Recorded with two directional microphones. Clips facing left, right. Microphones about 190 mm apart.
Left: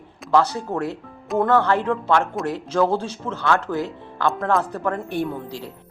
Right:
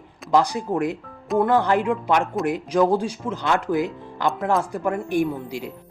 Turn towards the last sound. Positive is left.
turn(degrees=-15)  # may be behind; listen again after turning